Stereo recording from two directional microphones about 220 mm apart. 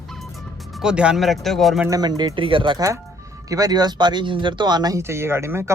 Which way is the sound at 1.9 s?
20° right (ahead or behind).